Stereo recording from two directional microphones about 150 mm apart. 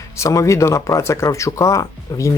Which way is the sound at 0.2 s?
20° left (ahead or behind).